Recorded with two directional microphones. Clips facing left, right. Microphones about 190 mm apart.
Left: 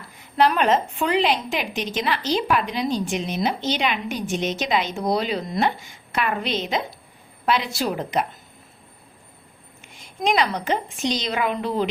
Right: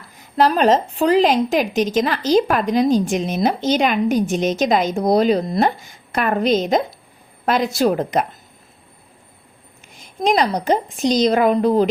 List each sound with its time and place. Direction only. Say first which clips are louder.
0.3 s a woman's voice: right 4 dB; 35° right (ahead or behind)
10.2 s a woman's voice: right 5 dB; 40° right (ahead or behind)